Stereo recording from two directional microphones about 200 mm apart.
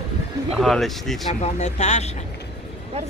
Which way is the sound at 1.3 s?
35° left (ahead or behind).